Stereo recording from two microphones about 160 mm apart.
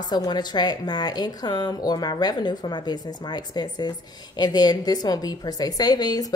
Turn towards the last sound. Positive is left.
turn(degrees=25)  # may be behind; listen again after turning